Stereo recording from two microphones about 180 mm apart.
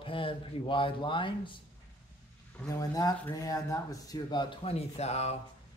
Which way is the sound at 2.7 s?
20° left (ahead or behind).